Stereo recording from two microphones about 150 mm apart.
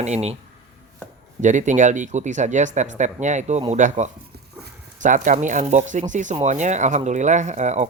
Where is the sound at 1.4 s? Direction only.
55° right (ahead or behind).